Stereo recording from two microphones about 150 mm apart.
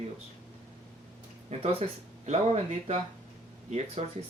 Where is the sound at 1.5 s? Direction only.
50° right (ahead or behind).